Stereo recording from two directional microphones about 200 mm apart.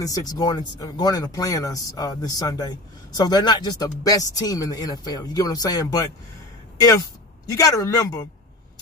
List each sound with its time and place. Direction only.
0.0 s speech: 20° left (ahead or behind)